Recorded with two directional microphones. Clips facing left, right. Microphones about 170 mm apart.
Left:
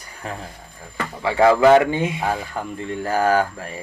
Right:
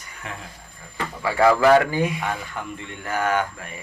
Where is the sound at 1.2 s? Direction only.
25° left (ahead or behind).